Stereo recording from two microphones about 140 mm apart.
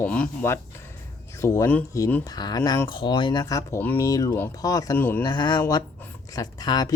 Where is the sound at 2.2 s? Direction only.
30° left (ahead or behind).